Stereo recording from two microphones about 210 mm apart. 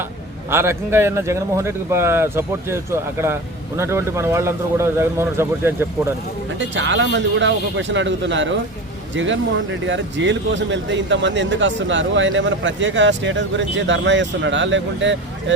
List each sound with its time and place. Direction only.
0.5 s speech: 10° right (ahead or behind)
6.6 s speech: 60° right (ahead or behind)